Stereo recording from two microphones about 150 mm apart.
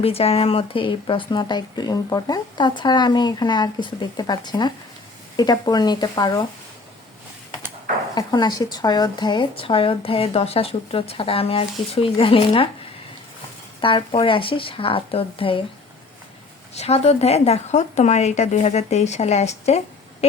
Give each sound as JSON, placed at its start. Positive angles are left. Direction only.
{"t": 0.0, "sound": "speech", "side_deg": 40}
{"t": 8.1, "sound": "speech", "side_deg": 30}
{"t": 13.8, "sound": "speech", "side_deg": 35}
{"t": 16.7, "sound": "speech", "side_deg": 45}